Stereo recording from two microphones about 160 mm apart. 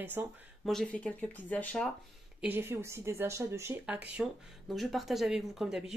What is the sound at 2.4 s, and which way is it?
A woman's voice, 15° right (ahead or behind).